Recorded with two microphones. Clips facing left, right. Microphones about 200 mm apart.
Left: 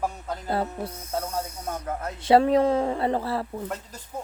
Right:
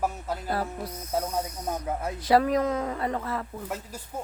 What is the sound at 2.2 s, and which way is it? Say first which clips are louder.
Speech: left 4 dB; 25° left (ahead or behind).